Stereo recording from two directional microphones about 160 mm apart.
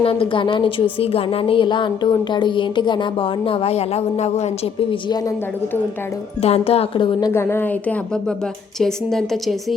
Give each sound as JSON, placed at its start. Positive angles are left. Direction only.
{"t": 0.0, "sound": "a woman's voice", "side_deg": 35}
{"t": 6.4, "sound": "a woman's voice", "side_deg": 40}